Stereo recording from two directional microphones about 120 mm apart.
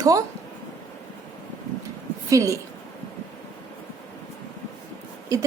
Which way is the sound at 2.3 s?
25° right (ahead or behind).